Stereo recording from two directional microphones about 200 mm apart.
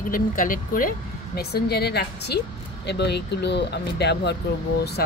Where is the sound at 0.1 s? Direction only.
45° left (ahead or behind).